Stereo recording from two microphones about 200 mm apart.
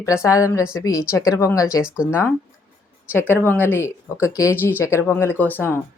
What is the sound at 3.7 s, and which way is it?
Speech, 15° left (ahead or behind).